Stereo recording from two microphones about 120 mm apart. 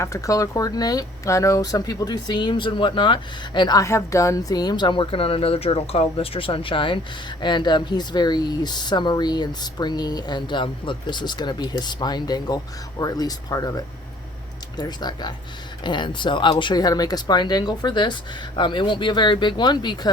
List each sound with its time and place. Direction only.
0.0 s speech: 25° left (ahead or behind)
3.8 s speech: 25° left (ahead or behind)